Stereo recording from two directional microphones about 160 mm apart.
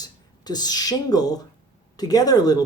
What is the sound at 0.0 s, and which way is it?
Speech, 25° left (ahead or behind).